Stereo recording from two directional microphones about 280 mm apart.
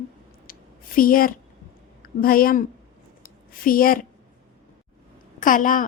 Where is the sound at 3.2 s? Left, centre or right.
Left.